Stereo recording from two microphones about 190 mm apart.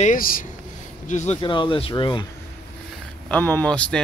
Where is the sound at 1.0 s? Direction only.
35° left (ahead or behind).